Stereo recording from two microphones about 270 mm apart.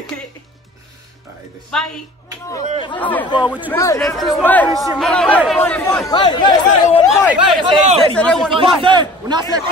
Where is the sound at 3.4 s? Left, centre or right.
Centre.